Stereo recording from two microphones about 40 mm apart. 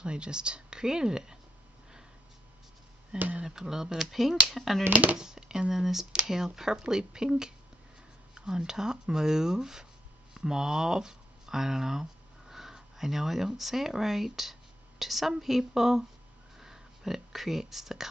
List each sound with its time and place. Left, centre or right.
0.0 s a woman's voice: right
3.1 s speech: centre
5.1 s speech: centre
16.5 s a sound: centre